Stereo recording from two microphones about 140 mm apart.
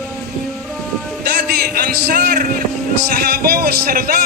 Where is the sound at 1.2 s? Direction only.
90° right.